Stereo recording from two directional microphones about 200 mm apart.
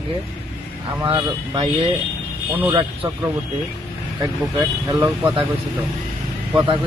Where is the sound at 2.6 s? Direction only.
10° right (ahead or behind).